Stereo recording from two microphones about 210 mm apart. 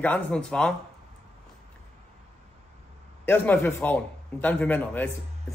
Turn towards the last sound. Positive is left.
turn(degrees=10)  # may be behind; listen again after turning